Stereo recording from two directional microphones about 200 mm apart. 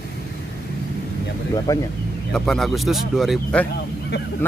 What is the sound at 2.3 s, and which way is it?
Speech, centre (ahead or behind).